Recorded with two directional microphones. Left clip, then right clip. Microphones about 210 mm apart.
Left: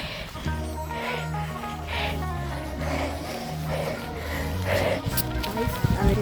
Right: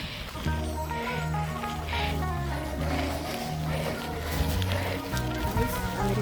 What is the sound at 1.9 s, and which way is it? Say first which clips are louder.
Music: left 3 dB; 55° left (ahead or behind).